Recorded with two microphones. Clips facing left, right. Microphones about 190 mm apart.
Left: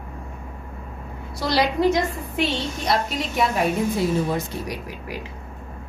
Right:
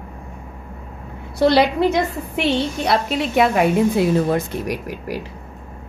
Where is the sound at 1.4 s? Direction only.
60° right (ahead or behind).